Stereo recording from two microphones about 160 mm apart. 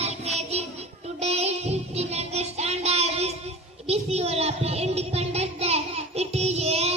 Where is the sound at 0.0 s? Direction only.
45° right (ahead or behind).